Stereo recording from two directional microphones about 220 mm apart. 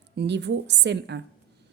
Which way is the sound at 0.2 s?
50° right (ahead or behind).